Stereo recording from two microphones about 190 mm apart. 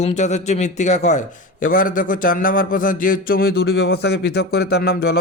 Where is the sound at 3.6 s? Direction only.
65° left (ahead or behind).